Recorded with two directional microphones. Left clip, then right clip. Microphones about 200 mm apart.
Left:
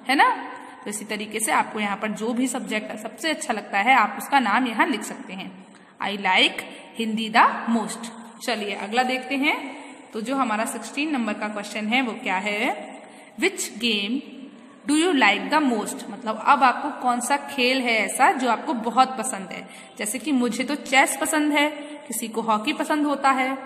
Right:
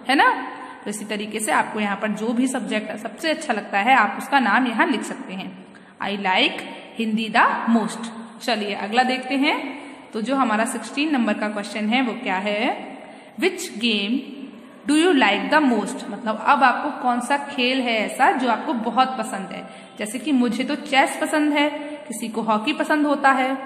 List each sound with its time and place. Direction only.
0.0 s a woman's voice: 15° left (ahead or behind)